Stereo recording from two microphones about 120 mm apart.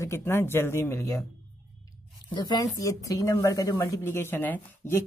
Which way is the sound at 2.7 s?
25° left (ahead or behind).